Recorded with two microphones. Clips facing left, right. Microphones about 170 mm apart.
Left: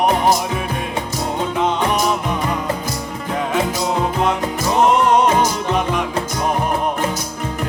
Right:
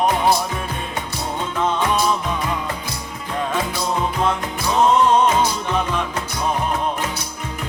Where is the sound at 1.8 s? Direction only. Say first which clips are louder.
Left 1 dB; 20° left (ahead or behind).